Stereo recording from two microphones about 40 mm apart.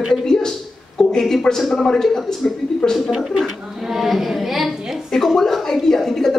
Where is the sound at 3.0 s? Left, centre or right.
Centre.